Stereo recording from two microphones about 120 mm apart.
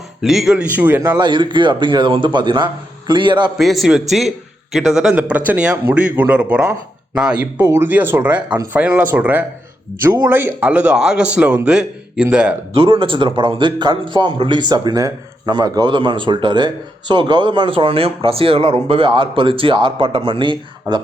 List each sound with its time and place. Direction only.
0.2 s a man's voice: 5° right (ahead or behind)
1.2 s speech: 40° right (ahead or behind)
3.6 s a man's voice: centre (ahead or behind)
6.6 s speech: 25° right (ahead or behind)
7.2 s a man's voice: 5° right (ahead or behind)
7.6 s a man's voice: 20° right (ahead or behind)
12.8 s speech: 45° right (ahead or behind)